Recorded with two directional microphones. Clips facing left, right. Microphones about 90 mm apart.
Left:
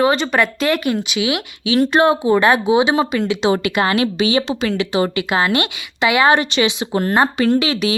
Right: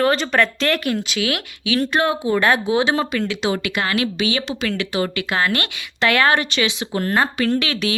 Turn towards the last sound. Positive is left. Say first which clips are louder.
# left 4 dB
turn(degrees=20)  # may be behind; listen again after turning